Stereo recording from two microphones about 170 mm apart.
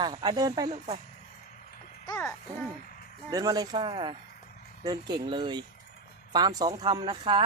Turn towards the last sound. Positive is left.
turn(degrees=-30)  # may be behind; listen again after turning